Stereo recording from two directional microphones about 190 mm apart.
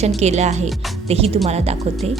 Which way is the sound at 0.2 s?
35° right (ahead or behind).